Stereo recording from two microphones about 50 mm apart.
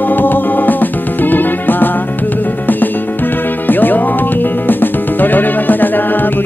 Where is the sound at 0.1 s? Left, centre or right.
Left.